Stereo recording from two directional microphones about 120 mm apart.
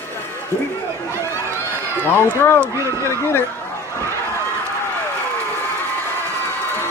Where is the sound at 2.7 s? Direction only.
25° right (ahead or behind).